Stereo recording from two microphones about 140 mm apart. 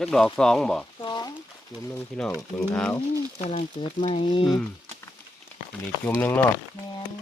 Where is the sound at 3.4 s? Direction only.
50° left (ahead or behind).